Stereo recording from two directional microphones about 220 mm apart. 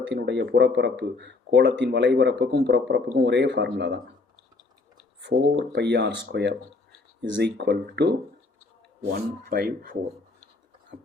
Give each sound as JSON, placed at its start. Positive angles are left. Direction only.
{"t": 0.0, "sound": "speech", "side_deg": -55}
{"t": 5.7, "sound": "speech", "side_deg": -50}
{"t": 9.1, "sound": "speech", "side_deg": -45}